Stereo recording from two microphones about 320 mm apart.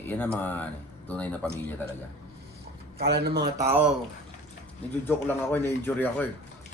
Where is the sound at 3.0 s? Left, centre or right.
Right.